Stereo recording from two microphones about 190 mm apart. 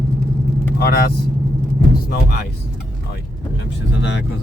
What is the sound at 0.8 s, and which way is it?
Speech, 55° left (ahead or behind).